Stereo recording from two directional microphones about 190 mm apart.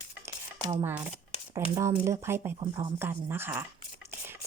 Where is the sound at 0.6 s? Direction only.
20° right (ahead or behind).